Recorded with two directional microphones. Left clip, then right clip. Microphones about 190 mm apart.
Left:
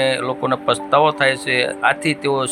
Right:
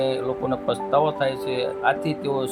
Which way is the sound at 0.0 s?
10° left (ahead or behind).